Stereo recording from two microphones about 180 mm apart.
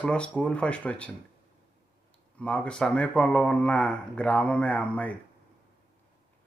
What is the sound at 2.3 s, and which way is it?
Speech, 5° left (ahead or behind).